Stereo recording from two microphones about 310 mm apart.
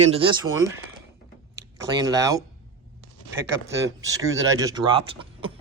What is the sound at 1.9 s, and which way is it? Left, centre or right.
Speech, centre.